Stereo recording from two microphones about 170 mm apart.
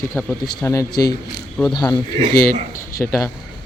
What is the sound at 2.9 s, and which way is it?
Speech, 15° left (ahead or behind).